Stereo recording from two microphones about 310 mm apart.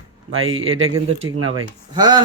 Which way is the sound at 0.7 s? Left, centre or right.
Right.